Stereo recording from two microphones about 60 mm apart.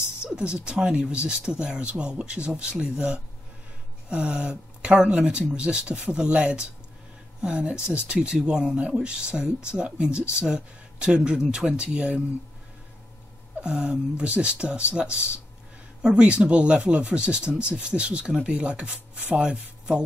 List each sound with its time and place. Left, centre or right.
0.2 s speech: centre
13.6 s speech: centre